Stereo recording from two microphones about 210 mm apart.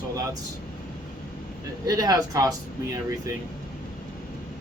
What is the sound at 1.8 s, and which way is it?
Speech, 15° right (ahead or behind).